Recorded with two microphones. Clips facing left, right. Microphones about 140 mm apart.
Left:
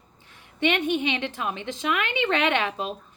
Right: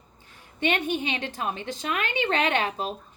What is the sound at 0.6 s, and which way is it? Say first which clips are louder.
Speech: left 3 dB; 40° right (ahead or behind).